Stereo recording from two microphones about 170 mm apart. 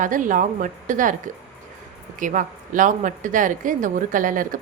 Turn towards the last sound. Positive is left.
turn(degrees=-50)  # may be behind; listen again after turning